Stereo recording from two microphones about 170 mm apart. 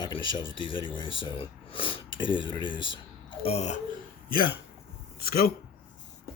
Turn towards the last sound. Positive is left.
turn(degrees=60)  # may be behind; listen again after turning